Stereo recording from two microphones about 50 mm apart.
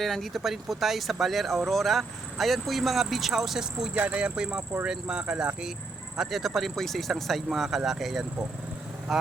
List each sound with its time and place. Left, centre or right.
0.0 s speech: centre
3.9 s speech: right
6.1 s speech: centre